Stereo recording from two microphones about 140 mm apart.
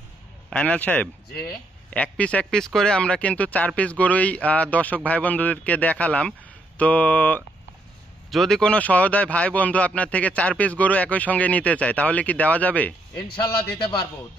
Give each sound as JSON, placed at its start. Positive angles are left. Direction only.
{"t": 0.5, "sound": "a man's voice", "side_deg": 10}
{"t": 13.4, "sound": "a man's voice", "side_deg": 30}